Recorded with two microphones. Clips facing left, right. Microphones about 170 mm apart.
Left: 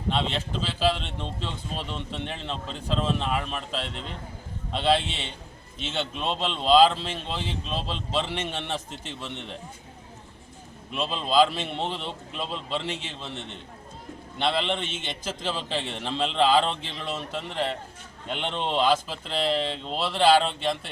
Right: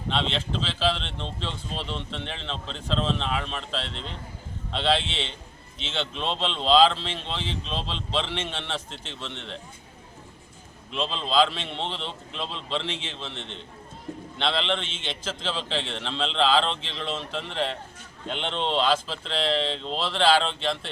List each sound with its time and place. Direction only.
0.1 s speech: 10° left (ahead or behind)
10.9 s speech: 10° left (ahead or behind)
14.3 s speech: 10° left (ahead or behind)
14.8 s a man's voice: 50° left (ahead or behind)
15.4 s speech: 10° left (ahead or behind)